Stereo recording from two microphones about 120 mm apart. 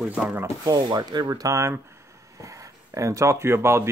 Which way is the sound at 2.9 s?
25° right (ahead or behind).